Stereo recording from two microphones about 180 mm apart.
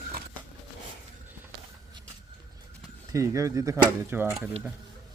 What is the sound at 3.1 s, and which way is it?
Speech, 15° right (ahead or behind).